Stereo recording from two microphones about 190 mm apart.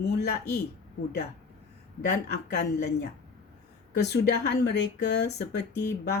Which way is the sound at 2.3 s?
60° left (ahead or behind).